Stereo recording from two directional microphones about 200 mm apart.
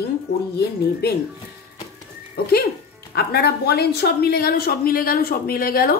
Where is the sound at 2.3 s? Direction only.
50° left (ahead or behind).